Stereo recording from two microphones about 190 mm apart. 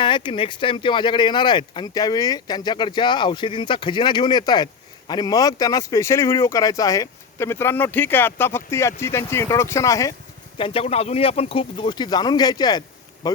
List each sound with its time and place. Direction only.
0.0 s speech: 25° left (ahead or behind)
10.6 s speech: 30° left (ahead or behind)
13.2 s a sound: 20° left (ahead or behind)